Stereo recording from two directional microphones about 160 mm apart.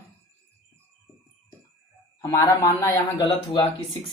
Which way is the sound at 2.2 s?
20° left (ahead or behind).